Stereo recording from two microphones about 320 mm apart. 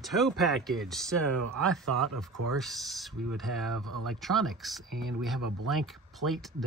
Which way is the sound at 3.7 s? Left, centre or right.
Right.